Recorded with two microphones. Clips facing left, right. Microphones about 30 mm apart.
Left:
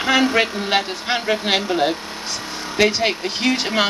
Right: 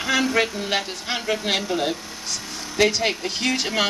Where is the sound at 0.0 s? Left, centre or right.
Left.